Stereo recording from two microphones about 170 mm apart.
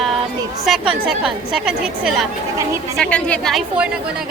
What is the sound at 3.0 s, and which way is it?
Speech, 5° left (ahead or behind).